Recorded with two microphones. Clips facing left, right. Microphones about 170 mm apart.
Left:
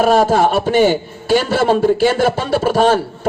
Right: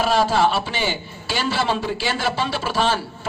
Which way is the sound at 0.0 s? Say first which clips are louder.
Left 6 dB; 50° left (ahead or behind).